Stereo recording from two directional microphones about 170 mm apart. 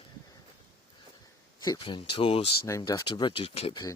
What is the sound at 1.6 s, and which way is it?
Speech, 30° left (ahead or behind).